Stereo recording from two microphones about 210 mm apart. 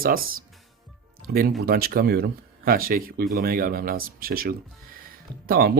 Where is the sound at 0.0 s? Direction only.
45° right (ahead or behind).